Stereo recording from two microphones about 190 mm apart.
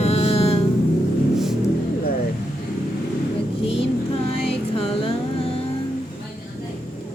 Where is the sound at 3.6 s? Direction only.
30° left (ahead or behind).